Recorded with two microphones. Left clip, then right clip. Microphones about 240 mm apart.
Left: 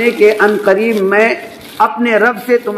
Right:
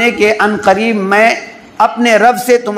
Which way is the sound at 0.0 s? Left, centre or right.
Right.